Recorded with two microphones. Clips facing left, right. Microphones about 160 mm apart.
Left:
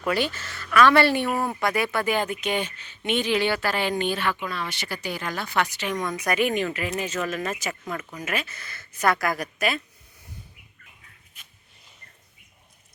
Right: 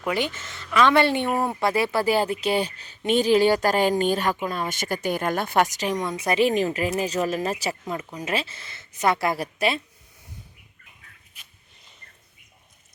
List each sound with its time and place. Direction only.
0.0 s speech: 20° right (ahead or behind); by 6.0 s 40° right (ahead or behind)
6.1 s speech: 25° right (ahead or behind)